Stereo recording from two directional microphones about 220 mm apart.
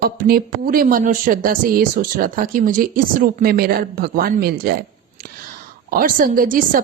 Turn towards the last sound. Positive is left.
turn(degrees=-40)  # may be behind; listen again after turning